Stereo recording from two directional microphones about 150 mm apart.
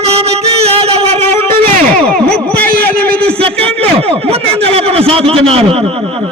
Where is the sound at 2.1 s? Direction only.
5° left (ahead or behind).